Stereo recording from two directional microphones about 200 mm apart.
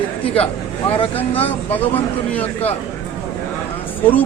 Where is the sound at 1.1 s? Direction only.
10° left (ahead or behind).